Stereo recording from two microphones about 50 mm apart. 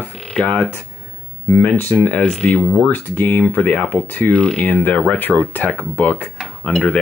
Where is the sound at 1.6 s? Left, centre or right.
Left.